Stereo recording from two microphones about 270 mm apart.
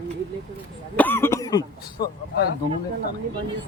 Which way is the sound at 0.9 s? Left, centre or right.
Centre.